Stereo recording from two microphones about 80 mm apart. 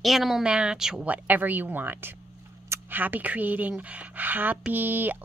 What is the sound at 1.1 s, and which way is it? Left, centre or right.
A woman's voice, right.